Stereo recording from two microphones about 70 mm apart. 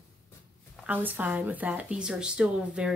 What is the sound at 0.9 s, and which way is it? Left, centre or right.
Speech, right.